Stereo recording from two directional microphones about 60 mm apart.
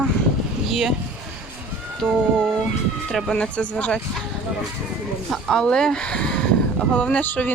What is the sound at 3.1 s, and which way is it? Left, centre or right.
Speech, centre.